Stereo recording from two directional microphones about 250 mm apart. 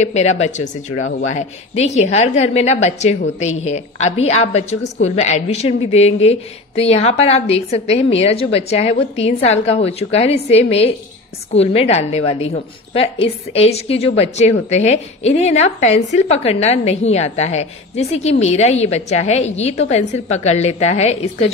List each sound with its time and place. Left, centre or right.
0.0 s a woman's voice: left